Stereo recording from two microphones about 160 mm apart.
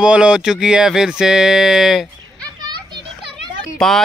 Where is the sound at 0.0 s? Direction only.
5° right (ahead or behind).